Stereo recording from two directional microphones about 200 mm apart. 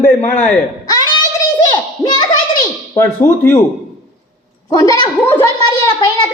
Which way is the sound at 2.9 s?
15° left (ahead or behind).